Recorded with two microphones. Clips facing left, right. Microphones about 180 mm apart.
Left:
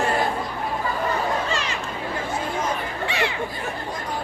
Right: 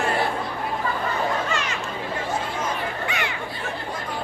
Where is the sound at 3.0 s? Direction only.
30° left (ahead or behind).